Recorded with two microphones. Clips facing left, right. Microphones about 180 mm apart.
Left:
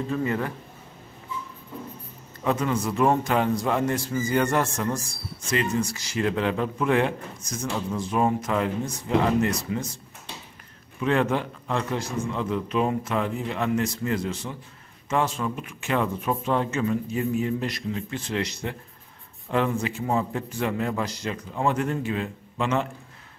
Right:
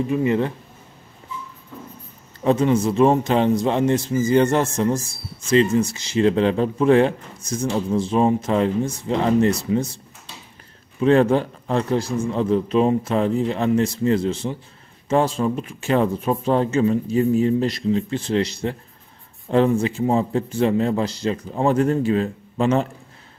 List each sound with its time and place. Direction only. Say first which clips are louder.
0.0 s a man's voice: right 7 dB; 15° right (ahead or behind)
2.4 s a man's voice: right 7 dB; 25° right (ahead or behind)
11.0 s speech: right 7 dB; 35° right (ahead or behind)